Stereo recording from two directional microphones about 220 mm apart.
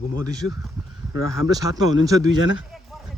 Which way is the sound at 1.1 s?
70° left (ahead or behind).